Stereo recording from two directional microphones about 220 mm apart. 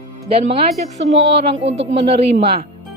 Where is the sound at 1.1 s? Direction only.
55° right (ahead or behind).